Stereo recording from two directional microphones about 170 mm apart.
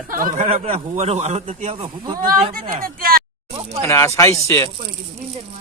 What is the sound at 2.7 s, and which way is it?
Speech, 60° right (ahead or behind).